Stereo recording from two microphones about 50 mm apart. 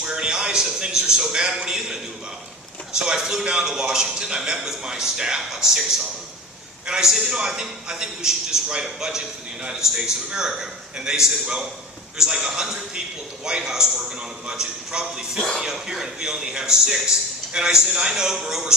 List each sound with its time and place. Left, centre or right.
0.0 s a man's voice: centre
6.8 s a man's voice: centre